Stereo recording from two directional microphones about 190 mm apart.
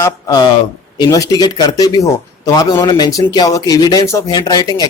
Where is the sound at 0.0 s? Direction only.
20° left (ahead or behind).